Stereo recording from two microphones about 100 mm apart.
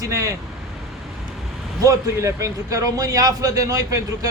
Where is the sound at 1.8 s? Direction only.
35° right (ahead or behind).